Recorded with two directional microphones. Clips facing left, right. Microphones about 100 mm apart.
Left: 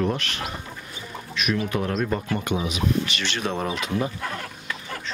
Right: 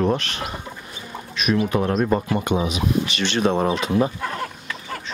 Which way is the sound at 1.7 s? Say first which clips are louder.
Right 5 dB; 35° right (ahead or behind).